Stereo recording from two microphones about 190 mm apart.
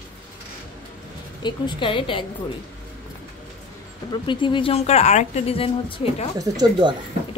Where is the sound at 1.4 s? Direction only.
25° left (ahead or behind).